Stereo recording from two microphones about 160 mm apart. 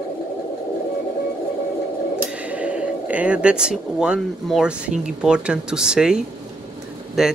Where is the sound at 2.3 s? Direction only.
10° right (ahead or behind).